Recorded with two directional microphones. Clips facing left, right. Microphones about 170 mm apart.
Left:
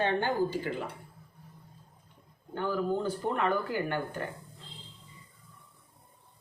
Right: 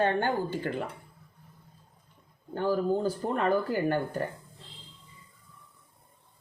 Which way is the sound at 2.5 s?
35° right (ahead or behind).